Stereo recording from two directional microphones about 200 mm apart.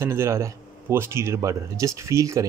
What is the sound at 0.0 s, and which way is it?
Speech, 15° right (ahead or behind).